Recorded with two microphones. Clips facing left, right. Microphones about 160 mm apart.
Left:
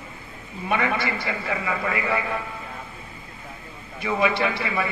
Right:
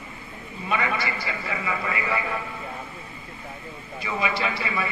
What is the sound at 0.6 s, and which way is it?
Speech, 60° left (ahead or behind).